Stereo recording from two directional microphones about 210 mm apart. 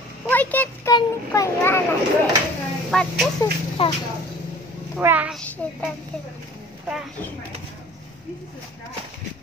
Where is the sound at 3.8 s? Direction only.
25° left (ahead or behind).